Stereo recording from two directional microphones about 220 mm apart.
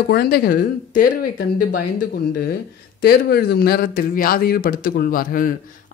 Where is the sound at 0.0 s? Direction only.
45° left (ahead or behind).